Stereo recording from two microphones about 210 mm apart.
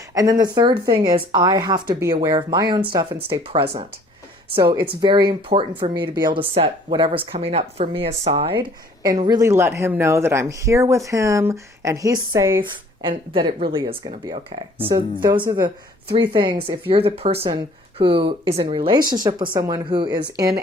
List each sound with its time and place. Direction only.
0.1 s speech: 15° right (ahead or behind)
9.2 s speech: 15° right (ahead or behind)